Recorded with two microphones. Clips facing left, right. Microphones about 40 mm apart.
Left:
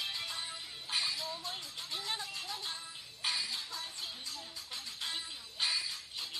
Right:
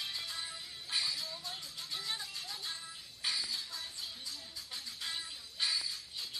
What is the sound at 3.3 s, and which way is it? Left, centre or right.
Music, left.